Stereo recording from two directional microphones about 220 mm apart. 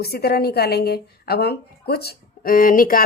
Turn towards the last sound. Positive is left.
turn(degrees=40)  # may be behind; listen again after turning